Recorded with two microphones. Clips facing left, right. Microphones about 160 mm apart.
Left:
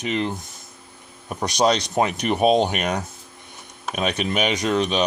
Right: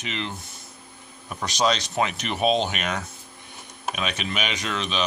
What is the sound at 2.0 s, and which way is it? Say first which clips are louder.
Speech: left 5 dB; 50° left (ahead or behind).